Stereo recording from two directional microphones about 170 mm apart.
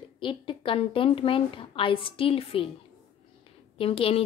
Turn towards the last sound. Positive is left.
turn(degrees=35)  # may be behind; listen again after turning